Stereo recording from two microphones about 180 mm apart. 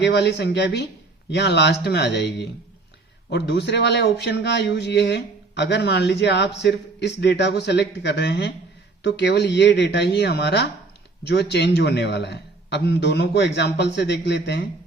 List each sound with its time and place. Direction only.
0.0 s speech: 70° left (ahead or behind)